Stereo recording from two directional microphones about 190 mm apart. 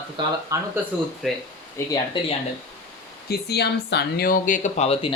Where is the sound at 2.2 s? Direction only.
25° left (ahead or behind).